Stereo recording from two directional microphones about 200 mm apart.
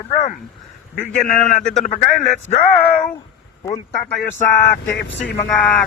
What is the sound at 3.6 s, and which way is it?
Speech, 15° left (ahead or behind).